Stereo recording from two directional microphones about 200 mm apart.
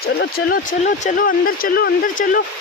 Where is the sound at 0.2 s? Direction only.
45° left (ahead or behind).